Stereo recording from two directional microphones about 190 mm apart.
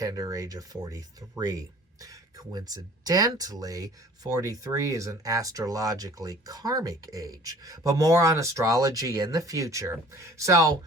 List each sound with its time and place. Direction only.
0.0 s speech: 20° right (ahead or behind)